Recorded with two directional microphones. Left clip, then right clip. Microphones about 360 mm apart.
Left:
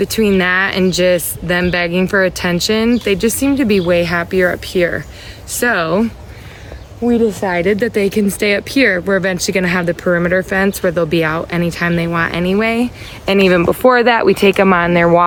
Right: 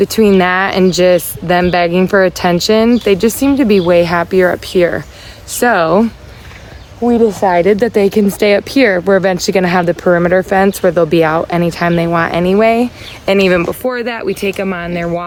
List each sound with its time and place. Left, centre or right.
0.0 s speech: centre
7.1 s speech: centre